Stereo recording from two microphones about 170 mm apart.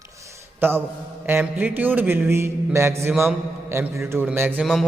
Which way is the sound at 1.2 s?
10° right (ahead or behind).